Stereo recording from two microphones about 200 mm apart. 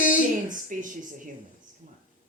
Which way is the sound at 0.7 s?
40° right (ahead or behind).